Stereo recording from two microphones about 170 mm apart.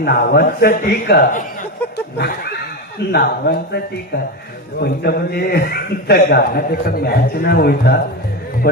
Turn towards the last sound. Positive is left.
turn(degrees=65)  # may be behind; listen again after turning